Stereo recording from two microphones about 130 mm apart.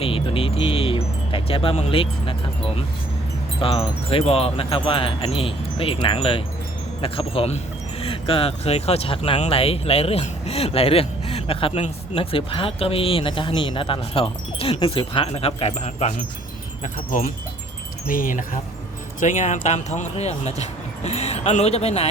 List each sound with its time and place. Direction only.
0.0 s speech: 45° left (ahead or behind)
3.6 s speech: 45° left (ahead or behind)
16.8 s speech: 85° left
19.2 s speech: 70° left (ahead or behind); by 22.0 s 55° left (ahead or behind)